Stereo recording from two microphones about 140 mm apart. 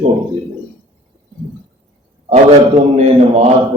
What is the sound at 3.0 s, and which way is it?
Speech, 50° right (ahead or behind).